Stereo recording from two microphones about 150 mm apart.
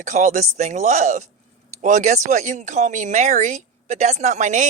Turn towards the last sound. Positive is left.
turn(degrees=-55)  # may be behind; listen again after turning